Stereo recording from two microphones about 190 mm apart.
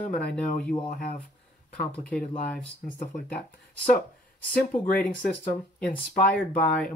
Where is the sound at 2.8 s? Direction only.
45° left (ahead or behind).